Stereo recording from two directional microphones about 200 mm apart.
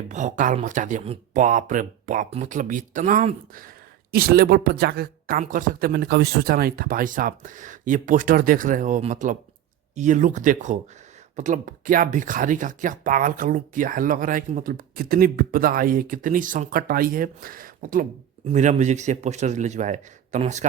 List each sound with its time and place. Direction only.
0.1 s speech: 35° right (ahead or behind)